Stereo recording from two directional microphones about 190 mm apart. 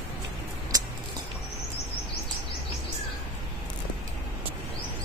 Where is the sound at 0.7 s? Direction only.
20° right (ahead or behind).